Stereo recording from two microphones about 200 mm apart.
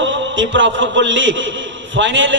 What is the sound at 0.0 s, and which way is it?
A man's voice, 70° right (ahead or behind).